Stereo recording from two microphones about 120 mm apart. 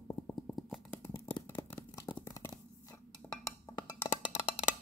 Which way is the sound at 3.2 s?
10° left (ahead or behind).